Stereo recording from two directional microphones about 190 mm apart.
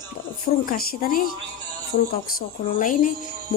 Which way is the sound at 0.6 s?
50° left (ahead or behind).